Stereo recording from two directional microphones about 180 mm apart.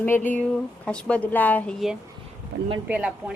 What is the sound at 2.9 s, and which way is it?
Speech, 5° right (ahead or behind).